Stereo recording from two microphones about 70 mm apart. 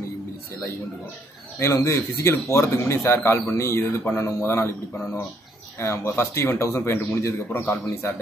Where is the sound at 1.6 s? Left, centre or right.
Left.